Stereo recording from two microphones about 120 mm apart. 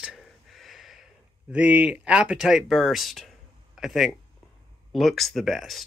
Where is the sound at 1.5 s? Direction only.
10° right (ahead or behind).